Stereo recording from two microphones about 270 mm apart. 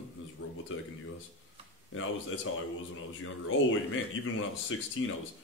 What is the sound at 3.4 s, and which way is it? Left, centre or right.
Speech, left.